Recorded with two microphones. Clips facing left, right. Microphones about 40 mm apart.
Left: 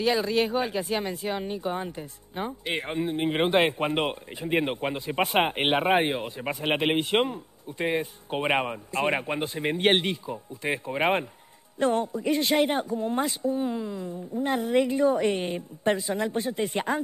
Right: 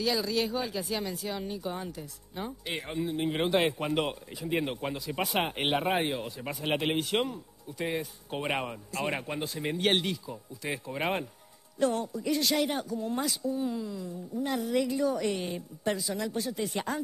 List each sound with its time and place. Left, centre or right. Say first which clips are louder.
0.0 s speech: left 5 dB; left